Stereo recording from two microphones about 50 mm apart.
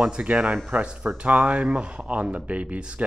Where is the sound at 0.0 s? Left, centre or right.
Centre.